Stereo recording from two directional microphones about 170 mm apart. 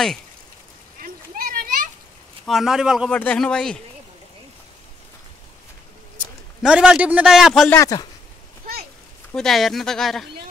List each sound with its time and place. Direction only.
0.9 s a sound: 60° right (ahead or behind)
2.4 s a man's voice: centre (ahead or behind)
6.6 s a man's voice: 5° right (ahead or behind)
7.7 s speech: 20° left (ahead or behind)
9.3 s a man's voice: centre (ahead or behind)